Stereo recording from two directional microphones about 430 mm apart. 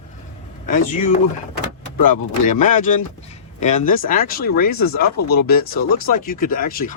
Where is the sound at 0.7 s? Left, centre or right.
Centre.